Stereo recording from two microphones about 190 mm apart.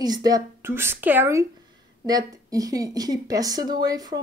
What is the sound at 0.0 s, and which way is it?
A woman's voice, 20° right (ahead or behind).